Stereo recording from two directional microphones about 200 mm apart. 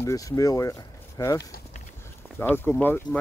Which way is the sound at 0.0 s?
15° left (ahead or behind).